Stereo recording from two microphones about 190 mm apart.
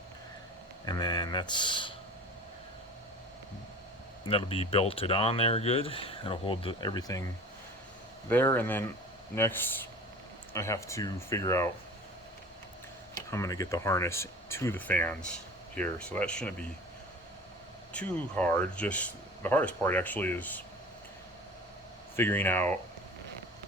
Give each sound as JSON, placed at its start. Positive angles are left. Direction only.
{"t": 0.9, "sound": "speech", "side_deg": 20}
{"t": 4.3, "sound": "speech", "side_deg": 30}
{"t": 8.3, "sound": "speech", "side_deg": 10}
{"t": 13.1, "sound": "speech", "side_deg": 15}
{"t": 17.9, "sound": "speech", "side_deg": 5}
{"t": 22.1, "sound": "speech", "side_deg": 10}